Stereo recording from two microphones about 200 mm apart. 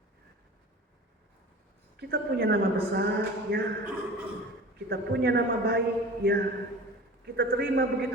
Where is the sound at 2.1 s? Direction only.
50° right (ahead or behind).